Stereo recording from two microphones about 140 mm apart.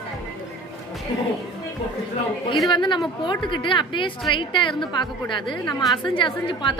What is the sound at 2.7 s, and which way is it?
A woman's voice, 35° left (ahead or behind).